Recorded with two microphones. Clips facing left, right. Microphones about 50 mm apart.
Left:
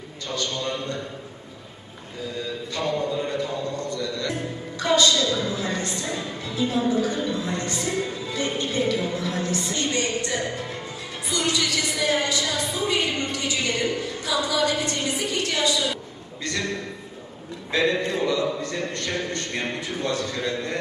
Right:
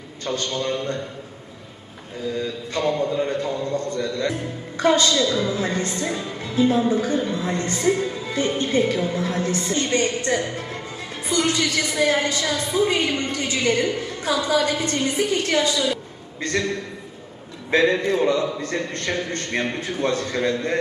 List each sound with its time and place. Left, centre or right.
0.3 s speech: right
2.7 s a man's voice: right
17.7 s a man's voice: right